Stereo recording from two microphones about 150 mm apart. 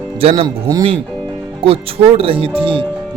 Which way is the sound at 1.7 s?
40° right (ahead or behind).